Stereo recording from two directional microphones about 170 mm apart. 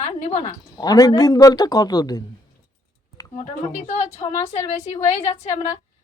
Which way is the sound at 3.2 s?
20° left (ahead or behind).